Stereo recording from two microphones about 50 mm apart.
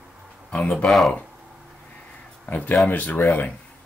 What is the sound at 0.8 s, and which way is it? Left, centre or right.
Speech, centre.